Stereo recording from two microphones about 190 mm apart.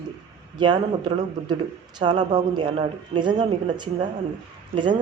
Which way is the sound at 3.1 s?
25° right (ahead or behind).